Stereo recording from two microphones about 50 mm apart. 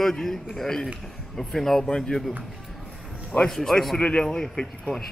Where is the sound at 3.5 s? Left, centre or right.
Centre.